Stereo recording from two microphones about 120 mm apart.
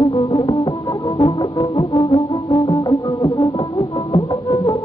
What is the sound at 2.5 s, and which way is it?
Music, 35° left (ahead or behind).